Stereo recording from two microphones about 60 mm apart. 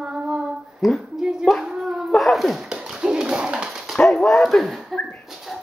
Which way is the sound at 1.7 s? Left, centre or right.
Centre.